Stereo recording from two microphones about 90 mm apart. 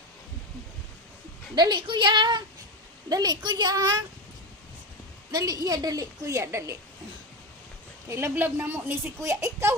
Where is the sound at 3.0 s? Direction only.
45° right (ahead or behind).